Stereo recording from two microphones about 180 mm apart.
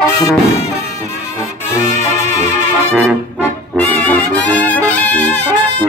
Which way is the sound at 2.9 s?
5° right (ahead or behind).